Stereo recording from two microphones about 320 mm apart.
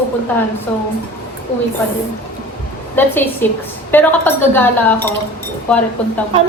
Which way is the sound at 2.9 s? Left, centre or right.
Centre.